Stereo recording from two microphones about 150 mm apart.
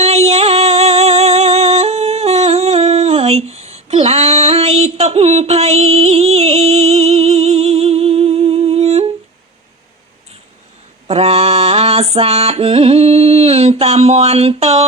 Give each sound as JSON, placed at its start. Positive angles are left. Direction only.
{"t": 0.0, "sound": "music", "side_deg": -45}
{"t": 11.1, "sound": "mantra", "side_deg": -45}